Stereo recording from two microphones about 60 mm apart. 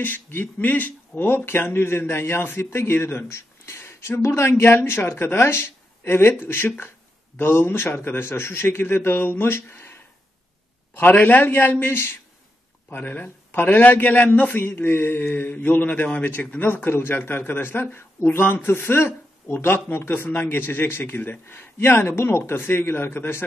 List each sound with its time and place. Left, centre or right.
0.0 s speech: left
11.0 s speech: left
12.9 s speech: left
14.7 s speech: left